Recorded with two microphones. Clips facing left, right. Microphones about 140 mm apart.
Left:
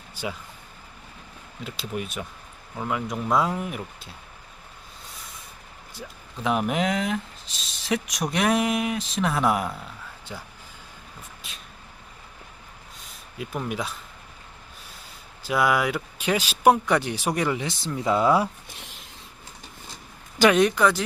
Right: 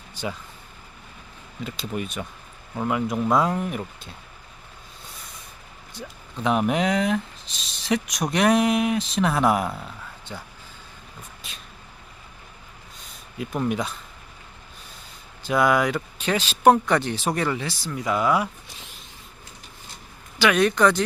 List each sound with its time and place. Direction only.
0.1 s vehicle: 10° left (ahead or behind)
1.6 s speech: centre (ahead or behind)
5.9 s speech: 5° left (ahead or behind)
11.4 s a sound: centre (ahead or behind)
13.0 s a sound: centre (ahead or behind)
15.4 s speech: 5° left (ahead or behind); by 18.4 s 30° left (ahead or behind)
20.5 s speech: 20° left (ahead or behind)
20.7 s speech: 5° left (ahead or behind)